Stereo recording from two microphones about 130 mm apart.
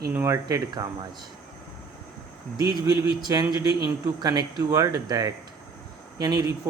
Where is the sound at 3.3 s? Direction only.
30° right (ahead or behind).